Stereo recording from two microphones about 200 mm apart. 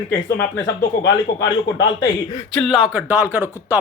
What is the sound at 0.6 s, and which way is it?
Speech, 65° left (ahead or behind).